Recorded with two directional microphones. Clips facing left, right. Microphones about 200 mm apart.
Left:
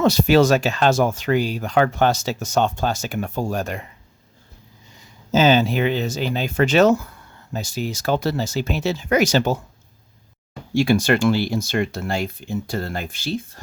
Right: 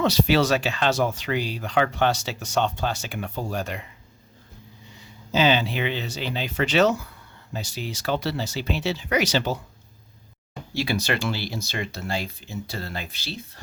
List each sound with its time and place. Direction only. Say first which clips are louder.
0.0 s speech: left 5 dB; 45° left (ahead or behind)
5.3 s speech: left 5 dB; 45° left (ahead or behind)
10.8 s speech: left 8 dB; 50° left (ahead or behind)